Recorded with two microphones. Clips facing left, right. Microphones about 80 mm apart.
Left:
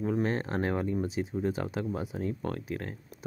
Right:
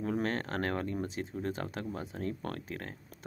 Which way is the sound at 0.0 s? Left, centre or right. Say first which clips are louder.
Left 3 dB; centre.